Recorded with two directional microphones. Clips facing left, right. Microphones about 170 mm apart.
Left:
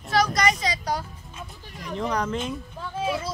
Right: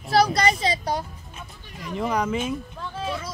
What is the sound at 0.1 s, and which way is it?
Speech, 30° right (ahead or behind).